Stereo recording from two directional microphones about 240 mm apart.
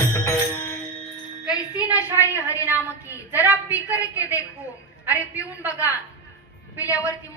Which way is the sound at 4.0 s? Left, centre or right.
Centre.